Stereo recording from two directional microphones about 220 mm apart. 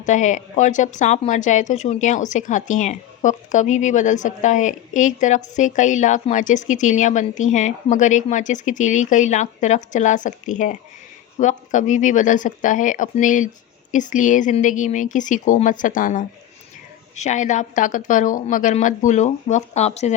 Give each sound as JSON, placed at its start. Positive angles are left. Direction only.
{"t": 0.0, "sound": "a woman's voice", "side_deg": 35}